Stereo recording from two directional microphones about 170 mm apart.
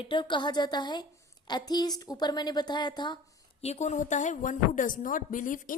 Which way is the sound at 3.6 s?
40° left (ahead or behind).